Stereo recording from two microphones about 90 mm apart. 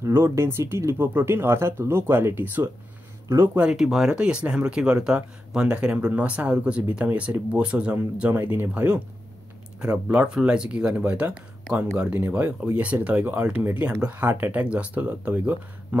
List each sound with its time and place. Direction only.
0.0 s speech: 30° right (ahead or behind)
3.5 s speech: 10° right (ahead or behind)